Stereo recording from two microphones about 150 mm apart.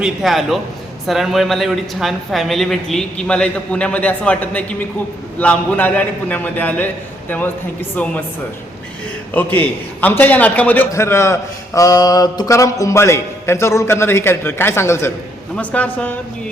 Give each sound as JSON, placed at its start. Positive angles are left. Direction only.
{"t": 0.0, "sound": "a man's voice", "side_deg": 0}
{"t": 9.3, "sound": "a man's voice", "side_deg": 15}